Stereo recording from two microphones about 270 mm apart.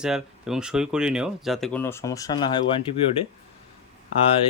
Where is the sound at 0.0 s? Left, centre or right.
Centre.